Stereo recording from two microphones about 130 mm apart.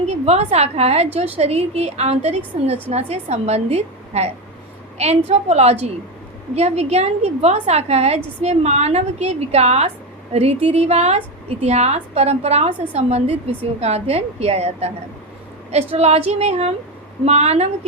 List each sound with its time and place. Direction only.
0.1 s a woman's voice: 55° right (ahead or behind)